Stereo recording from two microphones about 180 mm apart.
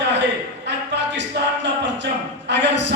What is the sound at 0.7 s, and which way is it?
Speech, 75° right (ahead or behind).